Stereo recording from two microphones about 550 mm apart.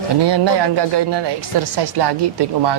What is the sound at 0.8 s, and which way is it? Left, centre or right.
Speech, right.